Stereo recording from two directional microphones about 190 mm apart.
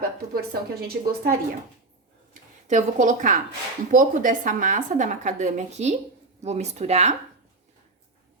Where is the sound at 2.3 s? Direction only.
40° right (ahead or behind).